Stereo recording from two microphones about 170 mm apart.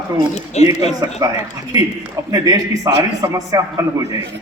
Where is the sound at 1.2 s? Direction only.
15° right (ahead or behind).